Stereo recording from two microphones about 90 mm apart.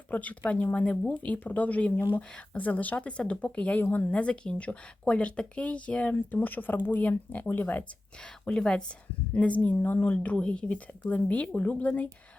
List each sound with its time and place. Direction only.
0.1 s speech: 15° left (ahead or behind)
8.2 s speech: 10° left (ahead or behind)